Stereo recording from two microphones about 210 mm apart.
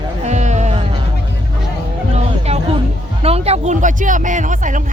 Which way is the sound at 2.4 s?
30° right (ahead or behind).